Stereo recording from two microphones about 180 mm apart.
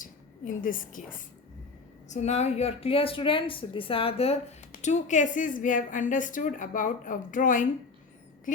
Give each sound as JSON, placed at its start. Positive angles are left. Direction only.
{"t": 0.0, "sound": "a woman's voice", "side_deg": 50}
{"t": 2.0, "sound": "a woman's voice", "side_deg": 40}